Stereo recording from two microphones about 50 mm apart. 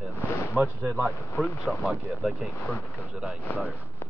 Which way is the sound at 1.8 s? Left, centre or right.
Right.